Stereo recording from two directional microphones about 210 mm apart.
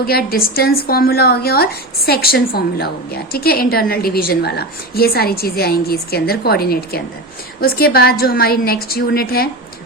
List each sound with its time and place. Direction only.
0.0 s a woman's voice: 45° left (ahead or behind)